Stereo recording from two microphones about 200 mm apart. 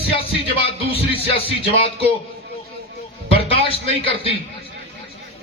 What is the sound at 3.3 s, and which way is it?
A man's voice, 30° left (ahead or behind).